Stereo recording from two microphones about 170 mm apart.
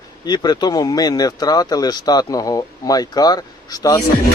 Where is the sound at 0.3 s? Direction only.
25° left (ahead or behind).